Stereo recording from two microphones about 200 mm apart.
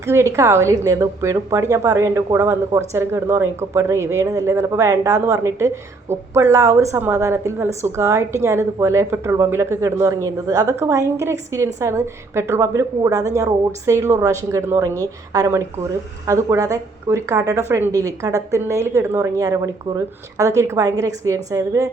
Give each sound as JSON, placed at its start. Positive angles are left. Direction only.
{"t": 0.0, "sound": "speech", "side_deg": -15}